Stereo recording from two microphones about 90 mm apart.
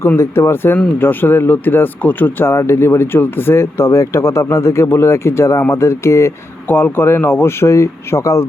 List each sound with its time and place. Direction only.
0.2 s speech: 30° left (ahead or behind)